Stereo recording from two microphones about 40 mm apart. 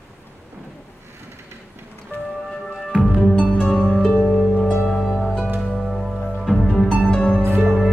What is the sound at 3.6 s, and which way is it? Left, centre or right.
Music, centre.